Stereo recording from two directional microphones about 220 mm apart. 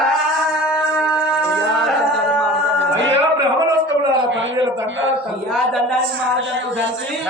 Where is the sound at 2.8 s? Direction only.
55° right (ahead or behind).